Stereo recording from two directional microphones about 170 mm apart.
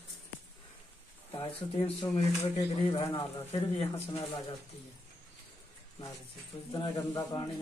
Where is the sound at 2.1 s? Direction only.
20° left (ahead or behind).